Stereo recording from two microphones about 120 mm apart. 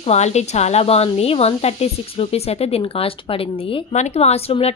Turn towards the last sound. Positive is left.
turn(degrees=55)  # may be behind; listen again after turning